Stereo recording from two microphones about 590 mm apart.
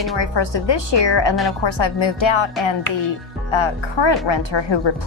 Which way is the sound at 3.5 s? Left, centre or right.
Left.